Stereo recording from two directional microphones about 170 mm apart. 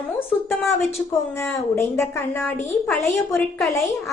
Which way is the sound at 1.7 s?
15° left (ahead or behind).